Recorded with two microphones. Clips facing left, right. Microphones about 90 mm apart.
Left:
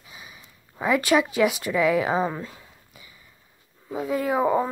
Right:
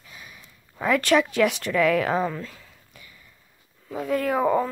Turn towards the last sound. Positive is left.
turn(degrees=10)  # may be behind; listen again after turning